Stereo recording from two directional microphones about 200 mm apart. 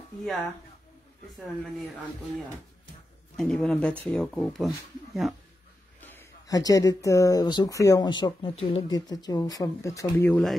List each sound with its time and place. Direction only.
0.2 s speech: centre (ahead or behind)
3.3 s speech: centre (ahead or behind)
5.9 s speech: 10° left (ahead or behind)